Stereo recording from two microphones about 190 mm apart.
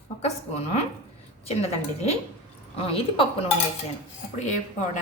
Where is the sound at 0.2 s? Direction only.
35° left (ahead or behind).